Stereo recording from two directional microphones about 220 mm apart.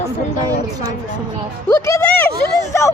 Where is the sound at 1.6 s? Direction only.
15° left (ahead or behind).